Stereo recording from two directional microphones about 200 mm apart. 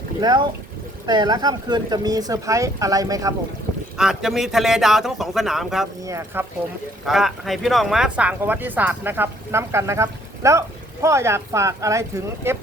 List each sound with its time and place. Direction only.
0.2 s speech: 20° right (ahead or behind)
3.9 s speech: 5° right (ahead or behind)
6.1 s speech: 15° right (ahead or behind)
7.0 s speech: centre (ahead or behind)